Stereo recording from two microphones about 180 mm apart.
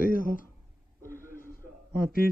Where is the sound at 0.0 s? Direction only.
50° left (ahead or behind).